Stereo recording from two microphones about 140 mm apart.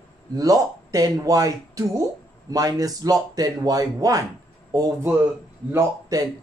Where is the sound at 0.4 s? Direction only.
25° right (ahead or behind).